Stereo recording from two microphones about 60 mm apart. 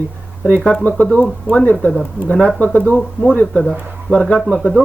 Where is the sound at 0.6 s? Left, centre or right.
Centre.